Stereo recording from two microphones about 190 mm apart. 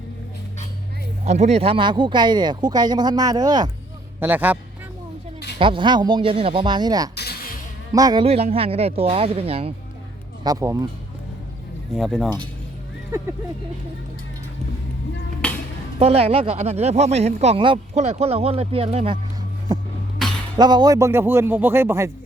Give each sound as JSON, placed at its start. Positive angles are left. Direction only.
{"t": 1.2, "sound": "speech", "side_deg": -35}
{"t": 4.2, "sound": "speech", "side_deg": -10}
{"t": 5.5, "sound": "speech", "side_deg": -25}
{"t": 7.2, "sound": "a sound", "side_deg": 55}
{"t": 7.9, "sound": "speech", "side_deg": -20}
{"t": 8.2, "sound": "speech", "side_deg": -35}
{"t": 10.4, "sound": "speech", "side_deg": -15}
{"t": 11.9, "sound": "speech", "side_deg": 0}
{"t": 15.4, "sound": "a sound", "side_deg": 5}
{"t": 16.0, "sound": "speech", "side_deg": -30}
{"t": 19.7, "sound": "a sound", "side_deg": -20}
{"t": 20.6, "sound": "speech", "side_deg": -20}